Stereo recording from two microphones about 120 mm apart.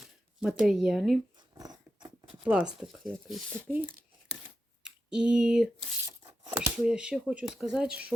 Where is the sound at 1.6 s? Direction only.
35° right (ahead or behind).